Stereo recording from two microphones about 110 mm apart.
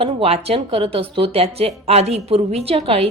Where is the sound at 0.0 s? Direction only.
65° right (ahead or behind).